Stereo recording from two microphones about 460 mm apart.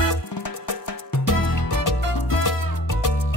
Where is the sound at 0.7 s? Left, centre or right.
Left.